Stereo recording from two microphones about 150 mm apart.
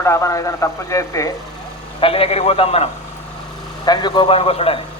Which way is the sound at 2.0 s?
40° left (ahead or behind).